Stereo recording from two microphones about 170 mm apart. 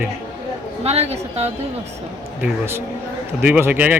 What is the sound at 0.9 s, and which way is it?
Speech, 40° right (ahead or behind).